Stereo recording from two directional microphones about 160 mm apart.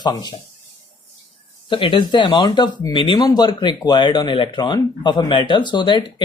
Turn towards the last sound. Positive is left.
turn(degrees=30)  # may be behind; listen again after turning